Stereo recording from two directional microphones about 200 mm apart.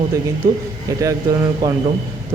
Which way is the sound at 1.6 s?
15° right (ahead or behind).